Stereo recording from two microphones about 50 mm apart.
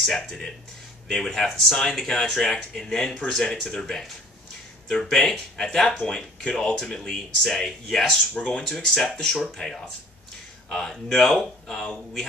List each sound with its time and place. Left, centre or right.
0.0 s speech: centre
8.4 s speech: centre
8.6 s speech: centre